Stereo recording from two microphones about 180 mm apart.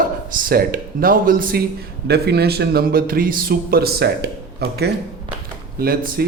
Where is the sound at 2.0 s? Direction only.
65° right (ahead or behind).